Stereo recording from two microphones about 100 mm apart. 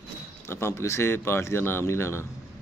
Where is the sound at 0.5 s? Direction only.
25° left (ahead or behind).